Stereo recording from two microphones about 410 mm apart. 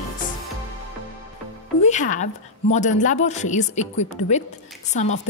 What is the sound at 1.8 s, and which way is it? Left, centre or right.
Speech, centre.